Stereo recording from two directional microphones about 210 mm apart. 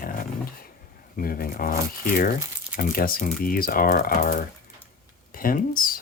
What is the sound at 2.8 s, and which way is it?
Speech, 45° left (ahead or behind).